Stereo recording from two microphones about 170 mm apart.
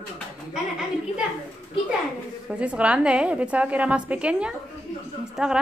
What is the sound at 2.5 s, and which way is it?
A woman's voice, 5° right (ahead or behind).